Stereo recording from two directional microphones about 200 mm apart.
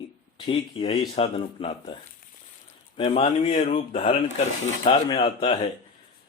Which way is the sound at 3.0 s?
30° left (ahead or behind).